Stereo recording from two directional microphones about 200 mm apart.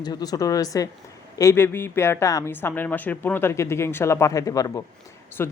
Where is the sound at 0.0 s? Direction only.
20° left (ahead or behind).